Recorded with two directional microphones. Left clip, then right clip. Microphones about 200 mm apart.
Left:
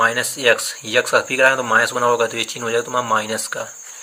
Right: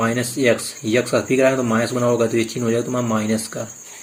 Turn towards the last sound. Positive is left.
turn(degrees=40)  # may be behind; listen again after turning